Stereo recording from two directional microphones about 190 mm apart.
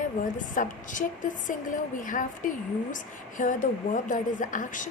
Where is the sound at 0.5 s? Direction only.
45° left (ahead or behind).